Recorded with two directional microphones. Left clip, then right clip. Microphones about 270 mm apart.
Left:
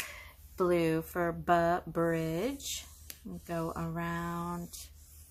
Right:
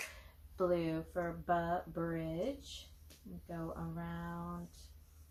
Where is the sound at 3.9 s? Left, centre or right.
Left.